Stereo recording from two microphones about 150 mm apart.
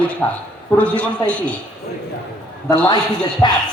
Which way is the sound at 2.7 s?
30° left (ahead or behind).